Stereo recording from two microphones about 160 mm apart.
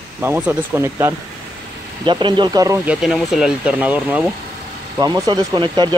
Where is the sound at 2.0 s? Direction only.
30° right (ahead or behind).